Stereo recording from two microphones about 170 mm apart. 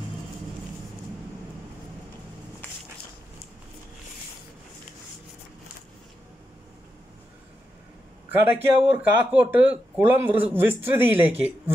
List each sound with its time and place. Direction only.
8.3 s a man's voice: 10° right (ahead or behind)